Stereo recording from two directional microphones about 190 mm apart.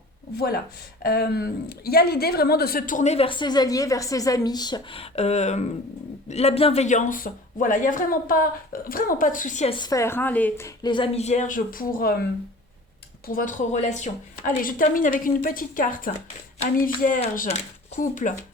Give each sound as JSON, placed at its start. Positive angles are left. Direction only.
{"t": 0.3, "sound": "speech", "side_deg": 55}
{"t": 9.7, "sound": "speech", "side_deg": 20}
{"t": 10.8, "sound": "speech", "side_deg": 25}
{"t": 13.2, "sound": "speech", "side_deg": 45}